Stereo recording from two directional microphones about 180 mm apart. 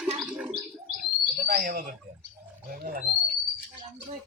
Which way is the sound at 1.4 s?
55° right (ahead or behind).